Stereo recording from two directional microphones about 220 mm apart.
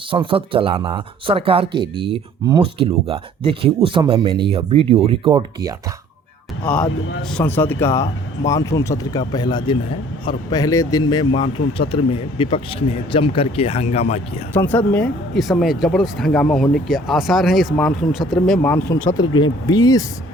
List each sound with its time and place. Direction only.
0.1 s speech: 25° right (ahead or behind)
7.3 s speech: 10° left (ahead or behind); by 14.4 s 30° left (ahead or behind)
14.5 s speech: 10° left (ahead or behind)